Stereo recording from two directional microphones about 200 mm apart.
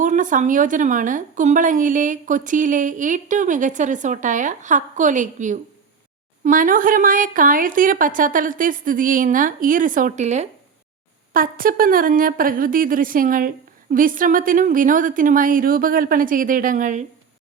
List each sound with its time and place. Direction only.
0.0 s a woman's voice: 40° right (ahead or behind)